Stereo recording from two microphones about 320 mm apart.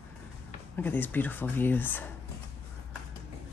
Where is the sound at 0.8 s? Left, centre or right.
Centre.